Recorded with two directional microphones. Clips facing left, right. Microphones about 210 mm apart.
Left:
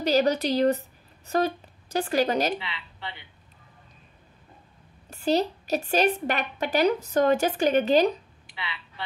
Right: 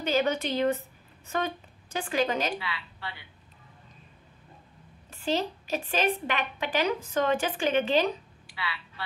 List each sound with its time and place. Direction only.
0.0 s speech: 40° left (ahead or behind)
2.5 s speech: 20° left (ahead or behind)
5.1 s a woman's voice: 40° left (ahead or behind)
8.5 s a sound: 20° left (ahead or behind)